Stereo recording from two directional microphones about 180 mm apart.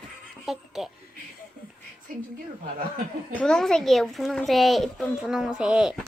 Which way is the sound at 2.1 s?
50° right (ahead or behind).